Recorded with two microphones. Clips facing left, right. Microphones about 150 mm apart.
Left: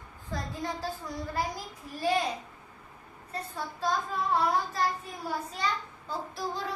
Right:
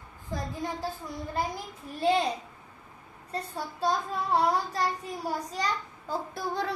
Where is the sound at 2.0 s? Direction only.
30° right (ahead or behind).